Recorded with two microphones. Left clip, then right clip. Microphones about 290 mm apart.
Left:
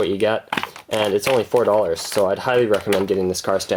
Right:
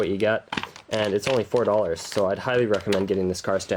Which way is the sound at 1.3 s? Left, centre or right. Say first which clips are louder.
Left 5 dB; left.